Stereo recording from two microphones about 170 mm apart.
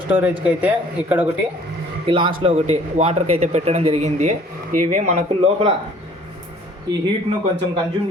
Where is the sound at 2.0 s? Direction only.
30° right (ahead or behind).